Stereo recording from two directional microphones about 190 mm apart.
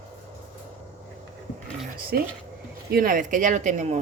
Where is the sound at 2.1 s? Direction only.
55° right (ahead or behind); by 4.0 s 40° right (ahead or behind).